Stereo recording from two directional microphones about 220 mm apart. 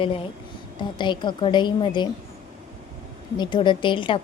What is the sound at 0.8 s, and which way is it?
A woman's voice, 20° left (ahead or behind).